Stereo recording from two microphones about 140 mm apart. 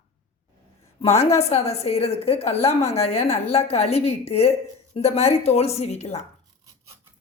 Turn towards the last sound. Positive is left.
turn(degrees=50)  # may be behind; listen again after turning